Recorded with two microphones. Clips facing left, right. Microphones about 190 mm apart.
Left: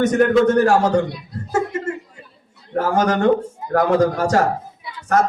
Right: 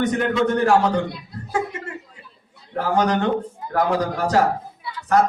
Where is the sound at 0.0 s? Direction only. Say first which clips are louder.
Left 6 dB; 45° left (ahead or behind).